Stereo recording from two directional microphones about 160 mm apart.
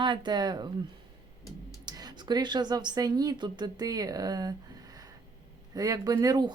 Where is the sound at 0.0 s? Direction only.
30° right (ahead or behind).